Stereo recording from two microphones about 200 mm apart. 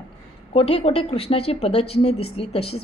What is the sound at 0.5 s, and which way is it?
A woman's voice, 30° left (ahead or behind).